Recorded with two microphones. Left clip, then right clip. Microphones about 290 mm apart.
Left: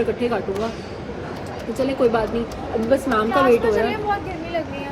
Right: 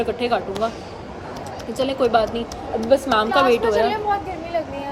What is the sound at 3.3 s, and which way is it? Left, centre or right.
Speech, right.